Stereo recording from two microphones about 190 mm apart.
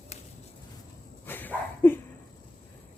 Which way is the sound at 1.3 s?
10° left (ahead or behind).